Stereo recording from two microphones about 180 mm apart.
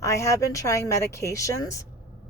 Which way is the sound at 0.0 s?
15° left (ahead or behind).